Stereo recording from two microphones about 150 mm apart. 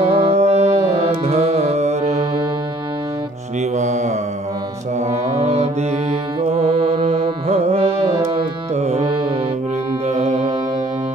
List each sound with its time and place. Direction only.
0.0 s music: 40° right (ahead or behind)
3.7 s mantra: 50° right (ahead or behind)
5.4 s music: 45° right (ahead or behind)
10.0 s music: 50° right (ahead or behind)